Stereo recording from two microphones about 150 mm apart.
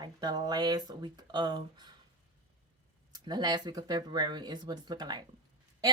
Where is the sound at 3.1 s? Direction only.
30° right (ahead or behind).